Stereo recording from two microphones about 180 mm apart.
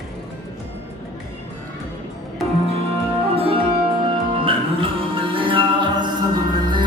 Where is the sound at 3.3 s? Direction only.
30° right (ahead or behind).